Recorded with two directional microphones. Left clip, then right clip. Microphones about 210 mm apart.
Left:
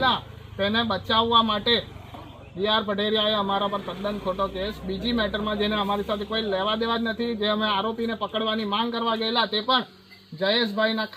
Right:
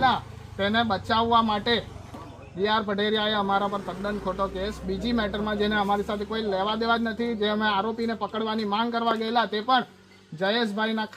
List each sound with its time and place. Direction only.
0.6 s a man's voice: centre (ahead or behind)